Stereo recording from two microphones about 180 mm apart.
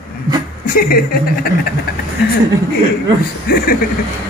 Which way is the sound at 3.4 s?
60° left (ahead or behind).